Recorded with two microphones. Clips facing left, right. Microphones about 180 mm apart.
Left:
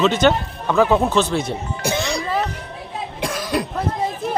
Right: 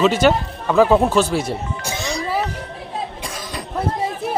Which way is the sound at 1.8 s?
60° left (ahead or behind).